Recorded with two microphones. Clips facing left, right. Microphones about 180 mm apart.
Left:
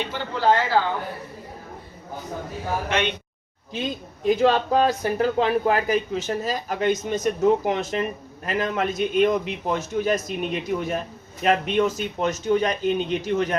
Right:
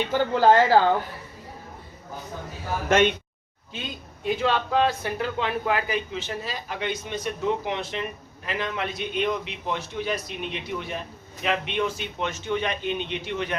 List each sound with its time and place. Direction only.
0.1 s speech: 45° right (ahead or behind)
2.9 s speech: 45° right (ahead or behind)
4.4 s speech: 40° left (ahead or behind)